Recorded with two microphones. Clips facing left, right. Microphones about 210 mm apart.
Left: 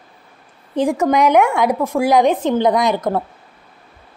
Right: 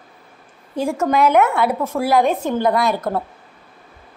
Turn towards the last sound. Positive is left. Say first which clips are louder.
# left 2 dB
turn(degrees=15)  # may be behind; listen again after turning